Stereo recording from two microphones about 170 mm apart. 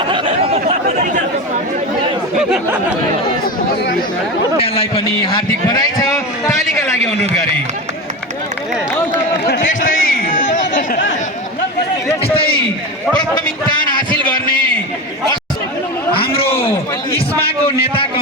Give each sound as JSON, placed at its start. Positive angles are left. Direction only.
{"t": 0.9, "sound": "chatter", "side_deg": -50}
{"t": 4.5, "sound": "a man's voice", "side_deg": 35}
{"t": 9.5, "sound": "a man's voice", "side_deg": 55}
{"t": 12.2, "sound": "a man's voice", "side_deg": 35}
{"t": 14.3, "sound": "a man's voice", "side_deg": 60}